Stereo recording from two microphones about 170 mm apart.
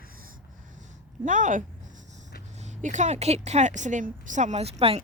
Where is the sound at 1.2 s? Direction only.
50° right (ahead or behind).